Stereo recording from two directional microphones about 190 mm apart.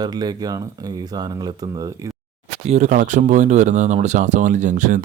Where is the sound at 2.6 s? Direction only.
40° right (ahead or behind).